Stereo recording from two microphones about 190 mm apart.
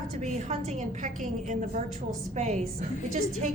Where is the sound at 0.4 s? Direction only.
40° right (ahead or behind).